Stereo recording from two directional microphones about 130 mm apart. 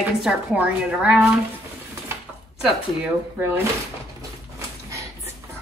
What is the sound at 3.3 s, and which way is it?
Speech, 15° right (ahead or behind).